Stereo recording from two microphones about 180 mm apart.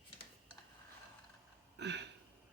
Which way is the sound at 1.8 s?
70° right (ahead or behind).